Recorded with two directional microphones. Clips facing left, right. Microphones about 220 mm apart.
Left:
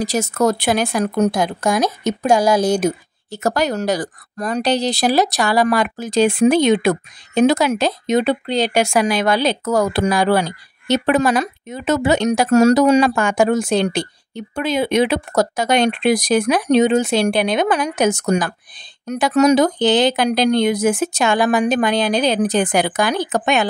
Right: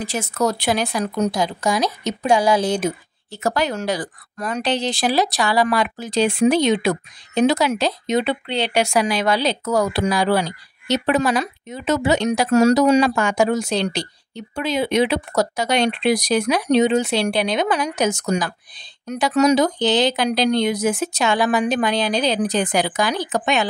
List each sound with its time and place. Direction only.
0.0 s speech: 40° left (ahead or behind)